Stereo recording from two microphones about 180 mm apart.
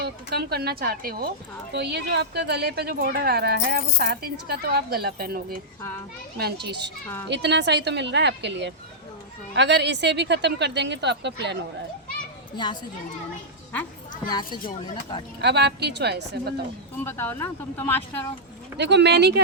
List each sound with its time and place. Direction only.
0.0 s speech: 60° right (ahead or behind)
14.3 s speech: 25° left (ahead or behind)
15.4 s speech: 70° right (ahead or behind)
17.0 s speech: 10° left (ahead or behind)
18.8 s speech: 70° right (ahead or behind)